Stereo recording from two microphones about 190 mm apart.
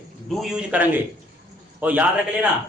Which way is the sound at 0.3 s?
Centre (ahead or behind).